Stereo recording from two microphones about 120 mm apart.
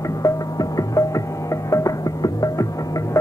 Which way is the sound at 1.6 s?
25° left (ahead or behind).